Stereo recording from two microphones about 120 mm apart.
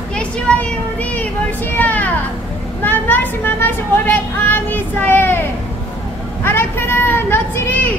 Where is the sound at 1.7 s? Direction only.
15° left (ahead or behind).